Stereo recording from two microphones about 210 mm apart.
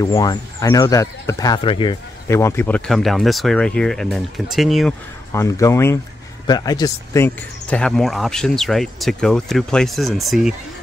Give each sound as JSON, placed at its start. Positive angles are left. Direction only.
{"t": 0.0, "sound": "speech", "side_deg": 20}
{"t": 2.2, "sound": "speech", "side_deg": 15}
{"t": 5.3, "sound": "speech", "side_deg": 15}